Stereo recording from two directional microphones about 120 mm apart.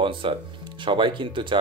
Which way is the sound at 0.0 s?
45° right (ahead or behind).